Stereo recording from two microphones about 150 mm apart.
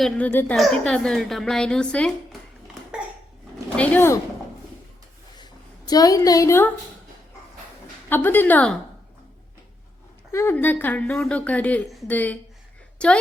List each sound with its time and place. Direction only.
0.0 s a woman's voice: 10° left (ahead or behind)
3.8 s a woman's voice: 15° left (ahead or behind)
5.4 s a sound: 25° left (ahead or behind)
8.1 s a woman's voice: 15° left (ahead or behind)
10.3 s a woman's voice: 15° left (ahead or behind)